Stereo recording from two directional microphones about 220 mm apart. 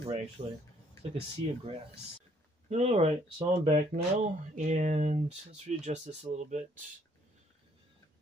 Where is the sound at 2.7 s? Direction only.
30° right (ahead or behind).